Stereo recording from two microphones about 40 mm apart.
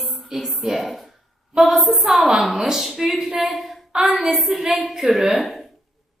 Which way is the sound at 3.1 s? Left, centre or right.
Centre.